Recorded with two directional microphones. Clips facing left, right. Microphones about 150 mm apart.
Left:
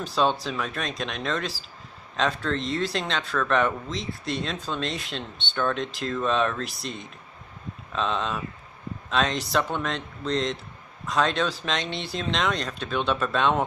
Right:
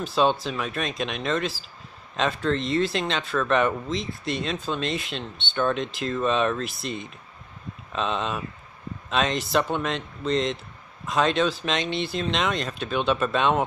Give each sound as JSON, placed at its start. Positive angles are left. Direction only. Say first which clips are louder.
{"t": 0.1, "sound": "speech", "louder": "right 2 dB", "side_deg": -5}